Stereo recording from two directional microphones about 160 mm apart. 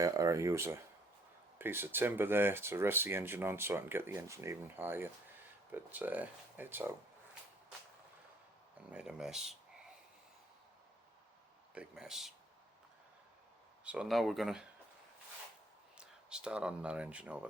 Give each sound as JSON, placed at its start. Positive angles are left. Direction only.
{"t": 0.0, "sound": "speech", "side_deg": -20}
{"t": 8.9, "sound": "speech", "side_deg": -5}
{"t": 11.7, "sound": "speech", "side_deg": -5}
{"t": 13.8, "sound": "speech", "side_deg": -5}
{"t": 16.0, "sound": "speech", "side_deg": -5}